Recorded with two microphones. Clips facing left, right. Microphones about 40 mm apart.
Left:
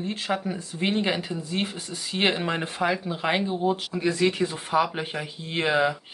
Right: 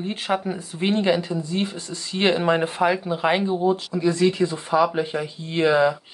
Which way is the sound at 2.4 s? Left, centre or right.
Centre.